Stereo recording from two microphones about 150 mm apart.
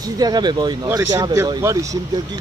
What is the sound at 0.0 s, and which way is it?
Speech, 25° right (ahead or behind).